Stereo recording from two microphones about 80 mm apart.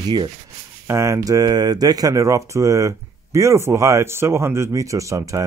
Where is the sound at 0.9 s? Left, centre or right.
Right.